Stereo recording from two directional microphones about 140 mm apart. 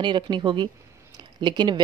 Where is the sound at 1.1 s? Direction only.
30° right (ahead or behind).